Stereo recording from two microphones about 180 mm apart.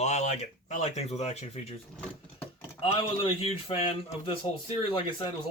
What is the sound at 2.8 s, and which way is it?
Speech, 30° left (ahead or behind).